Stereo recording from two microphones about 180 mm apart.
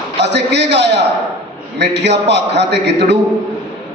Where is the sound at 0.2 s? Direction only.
70° right (ahead or behind).